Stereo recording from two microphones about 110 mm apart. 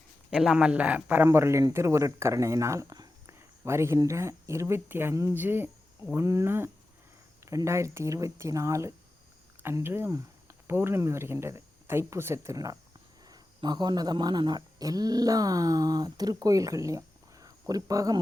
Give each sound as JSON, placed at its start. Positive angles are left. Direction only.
{"t": 0.3, "sound": "speech", "side_deg": -5}